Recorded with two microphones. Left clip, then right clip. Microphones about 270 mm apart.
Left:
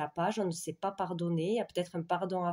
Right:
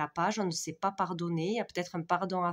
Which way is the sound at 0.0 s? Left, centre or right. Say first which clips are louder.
Right 2 dB; right.